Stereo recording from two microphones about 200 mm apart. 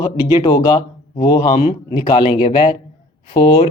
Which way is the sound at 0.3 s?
20° left (ahead or behind).